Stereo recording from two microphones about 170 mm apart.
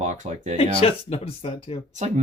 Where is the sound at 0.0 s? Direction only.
45° right (ahead or behind).